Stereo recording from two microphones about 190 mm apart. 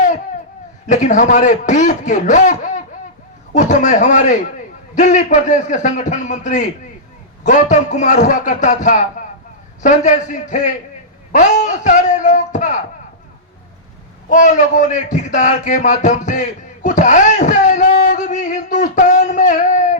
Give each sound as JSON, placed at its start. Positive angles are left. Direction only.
{"t": 0.9, "sound": "speech", "side_deg": 40}
{"t": 14.3, "sound": "speech", "side_deg": 40}